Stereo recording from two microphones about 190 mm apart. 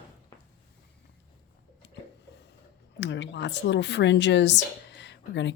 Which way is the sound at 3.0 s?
70° left (ahead or behind).